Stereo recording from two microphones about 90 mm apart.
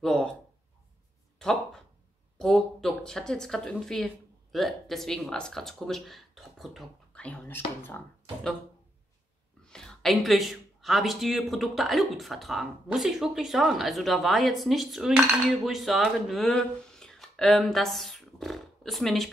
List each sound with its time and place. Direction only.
0.0 s speech: 5° left (ahead or behind)
1.4 s a sound: 5° left (ahead or behind)
2.3 s speech: 5° left (ahead or behind)
7.2 s speech: 20° left (ahead or behind)
9.7 s speech: 5° left (ahead or behind)